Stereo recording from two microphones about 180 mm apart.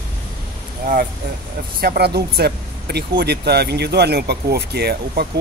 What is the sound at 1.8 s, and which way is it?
Speech, 60° right (ahead or behind).